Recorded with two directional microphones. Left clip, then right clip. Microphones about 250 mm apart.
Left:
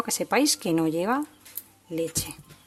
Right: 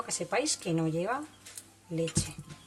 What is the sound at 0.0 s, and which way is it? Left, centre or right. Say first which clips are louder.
Speech: left 7 dB; left.